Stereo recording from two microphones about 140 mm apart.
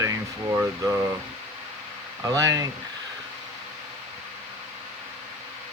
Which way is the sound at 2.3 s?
25° right (ahead or behind).